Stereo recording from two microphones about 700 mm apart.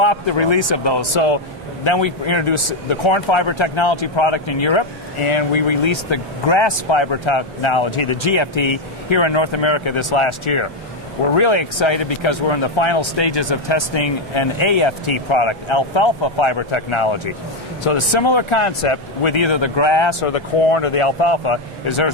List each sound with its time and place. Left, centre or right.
0.0 s speech: left